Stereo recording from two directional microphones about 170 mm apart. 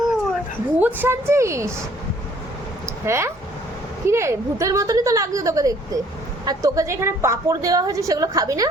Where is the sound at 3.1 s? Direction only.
15° right (ahead or behind).